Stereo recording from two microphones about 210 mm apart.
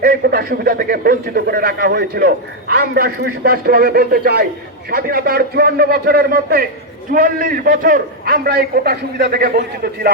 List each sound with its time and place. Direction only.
0.0 s a man's voice: 45° right (ahead or behind)